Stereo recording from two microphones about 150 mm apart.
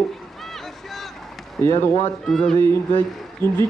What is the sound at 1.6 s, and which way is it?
Speech, 15° left (ahead or behind).